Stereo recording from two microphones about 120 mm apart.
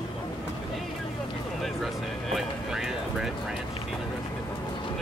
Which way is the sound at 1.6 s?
Centre (ahead or behind).